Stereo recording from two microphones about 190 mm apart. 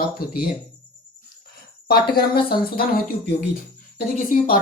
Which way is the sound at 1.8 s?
55° left (ahead or behind).